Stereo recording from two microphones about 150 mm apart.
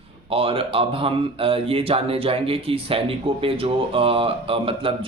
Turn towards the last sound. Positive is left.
turn(degrees=-35)  # may be behind; listen again after turning